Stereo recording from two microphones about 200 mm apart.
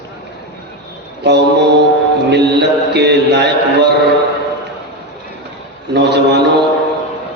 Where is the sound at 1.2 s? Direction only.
60° right (ahead or behind).